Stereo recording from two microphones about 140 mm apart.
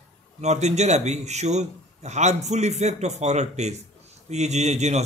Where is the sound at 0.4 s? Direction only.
55° right (ahead or behind).